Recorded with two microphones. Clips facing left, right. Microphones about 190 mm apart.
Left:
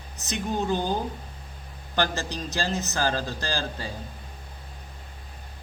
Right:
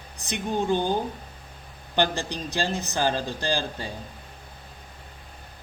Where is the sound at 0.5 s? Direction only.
15° right (ahead or behind).